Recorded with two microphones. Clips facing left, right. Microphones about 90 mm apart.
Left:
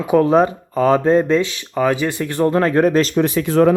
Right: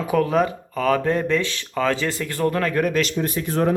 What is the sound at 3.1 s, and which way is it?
Speech, 90° left.